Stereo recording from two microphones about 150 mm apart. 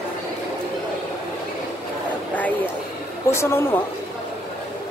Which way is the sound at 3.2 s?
15° left (ahead or behind).